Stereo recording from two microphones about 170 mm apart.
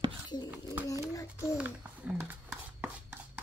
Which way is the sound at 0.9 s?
20° left (ahead or behind).